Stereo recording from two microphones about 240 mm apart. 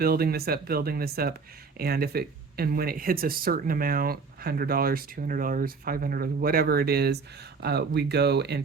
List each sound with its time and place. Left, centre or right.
0.0 s speech: right